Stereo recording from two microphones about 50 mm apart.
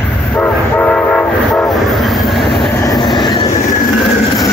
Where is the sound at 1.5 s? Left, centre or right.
Centre.